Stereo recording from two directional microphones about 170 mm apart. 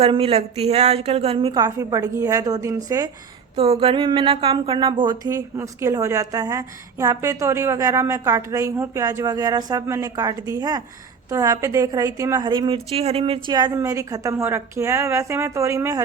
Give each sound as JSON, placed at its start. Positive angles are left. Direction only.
{"t": 0.0, "sound": "a woman's voice", "side_deg": -35}
{"t": 3.5, "sound": "speech", "side_deg": -35}